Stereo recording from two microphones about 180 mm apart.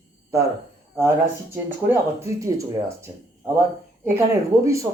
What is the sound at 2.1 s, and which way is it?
Speech, 15° right (ahead or behind).